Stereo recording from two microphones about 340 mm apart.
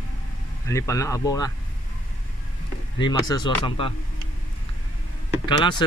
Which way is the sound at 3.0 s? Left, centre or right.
Centre.